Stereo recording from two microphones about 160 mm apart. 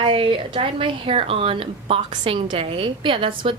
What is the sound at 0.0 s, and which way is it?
Speech, 35° right (ahead or behind).